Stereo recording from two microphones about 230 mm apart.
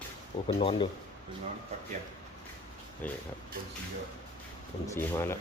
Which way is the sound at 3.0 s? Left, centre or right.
Centre.